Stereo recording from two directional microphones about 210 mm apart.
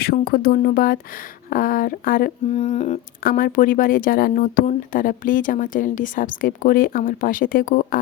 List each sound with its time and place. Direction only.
0.0 s speech: 45° left (ahead or behind)